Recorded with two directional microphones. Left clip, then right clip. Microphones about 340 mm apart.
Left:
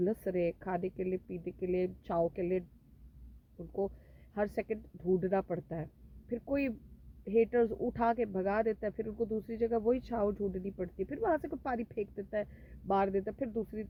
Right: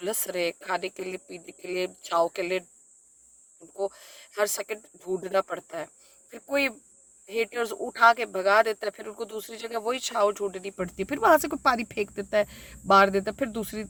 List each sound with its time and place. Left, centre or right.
0.0 s speech: centre
4.4 s speech: centre